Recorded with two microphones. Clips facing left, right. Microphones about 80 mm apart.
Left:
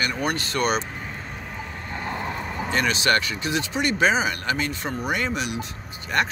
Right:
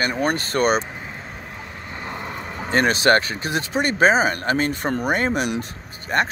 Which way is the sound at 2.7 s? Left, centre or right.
Right.